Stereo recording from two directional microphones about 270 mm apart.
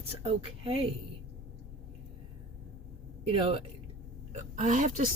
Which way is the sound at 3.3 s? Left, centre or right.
Centre.